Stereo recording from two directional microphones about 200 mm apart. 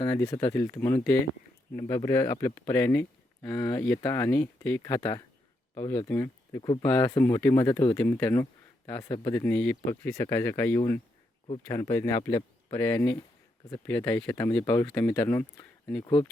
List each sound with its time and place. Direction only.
0.0 s speech: 10° left (ahead or behind)